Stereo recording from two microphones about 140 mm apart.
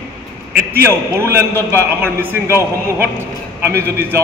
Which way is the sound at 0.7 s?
20° right (ahead or behind).